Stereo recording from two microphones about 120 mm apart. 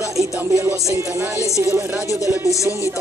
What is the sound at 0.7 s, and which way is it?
Speech, 25° right (ahead or behind).